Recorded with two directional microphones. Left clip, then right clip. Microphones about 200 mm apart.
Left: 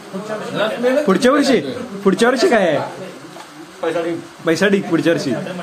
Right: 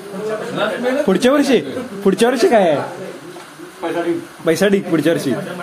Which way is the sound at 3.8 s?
50° left (ahead or behind).